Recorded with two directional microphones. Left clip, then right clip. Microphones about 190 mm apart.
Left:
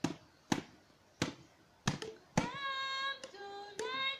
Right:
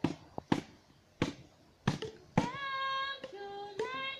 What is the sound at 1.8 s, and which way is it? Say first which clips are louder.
Hands: right 2 dB; 50° left (ahead or behind).